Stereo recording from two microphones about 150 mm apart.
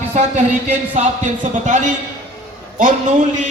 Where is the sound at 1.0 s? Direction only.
60° right (ahead or behind).